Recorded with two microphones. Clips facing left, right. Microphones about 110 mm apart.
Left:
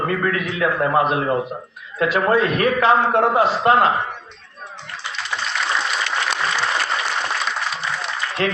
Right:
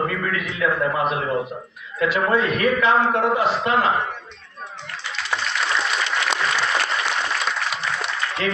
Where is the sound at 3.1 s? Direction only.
45° left (ahead or behind).